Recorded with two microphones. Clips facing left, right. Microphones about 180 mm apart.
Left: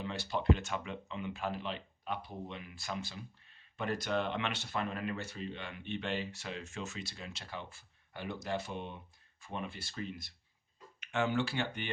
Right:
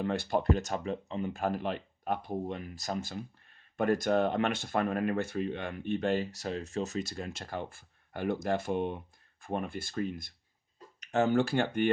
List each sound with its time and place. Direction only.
0.0 s speech: 50° right (ahead or behind)
11.0 s speech: 40° right (ahead or behind)